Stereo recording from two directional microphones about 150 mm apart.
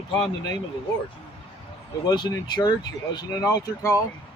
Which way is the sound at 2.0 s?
25° left (ahead or behind).